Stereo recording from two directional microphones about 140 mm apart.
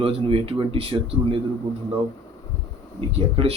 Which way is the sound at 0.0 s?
40° right (ahead or behind).